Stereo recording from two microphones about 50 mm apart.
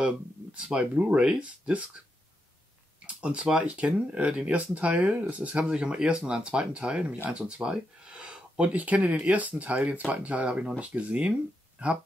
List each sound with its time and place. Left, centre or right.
0.0 s speech: right
3.2 s speech: right